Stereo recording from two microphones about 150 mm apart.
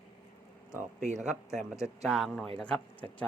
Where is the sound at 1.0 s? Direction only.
55° right (ahead or behind).